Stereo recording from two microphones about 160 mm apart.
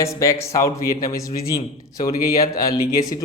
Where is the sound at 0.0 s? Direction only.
20° left (ahead or behind).